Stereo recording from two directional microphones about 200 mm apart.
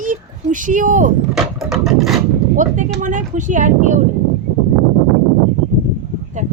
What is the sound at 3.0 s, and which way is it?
Speech, 40° right (ahead or behind).